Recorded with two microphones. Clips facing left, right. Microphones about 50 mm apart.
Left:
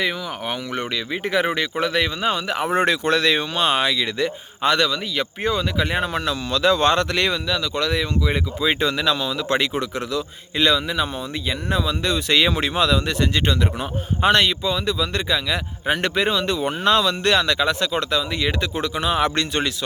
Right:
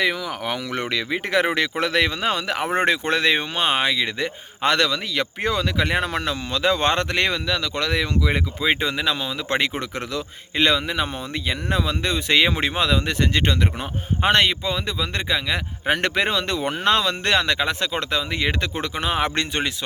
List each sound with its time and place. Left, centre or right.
0.0 s speech: right
1.7 s speech: right
2.6 s speech: right
4.6 s speech: right
6.5 s speech: right
7.4 s a man's voice: right
8.6 s speech: right
9.6 s a man's voice: right
12.0 s speech: right
15.9 s speech: right